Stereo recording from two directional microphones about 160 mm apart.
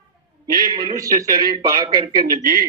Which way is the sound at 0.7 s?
25° right (ahead or behind).